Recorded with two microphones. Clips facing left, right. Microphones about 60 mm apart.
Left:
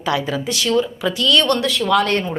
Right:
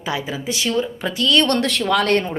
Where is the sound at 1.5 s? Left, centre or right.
Right.